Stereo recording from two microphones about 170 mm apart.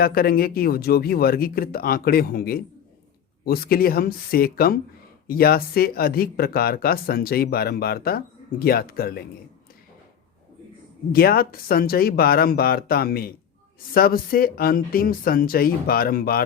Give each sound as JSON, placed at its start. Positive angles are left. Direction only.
{"t": 0.0, "sound": "speech", "side_deg": 60}
{"t": 11.1, "sound": "speech", "side_deg": 60}